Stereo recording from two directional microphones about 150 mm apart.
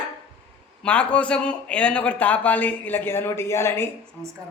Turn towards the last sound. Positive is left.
turn(degrees=15)  # may be behind; listen again after turning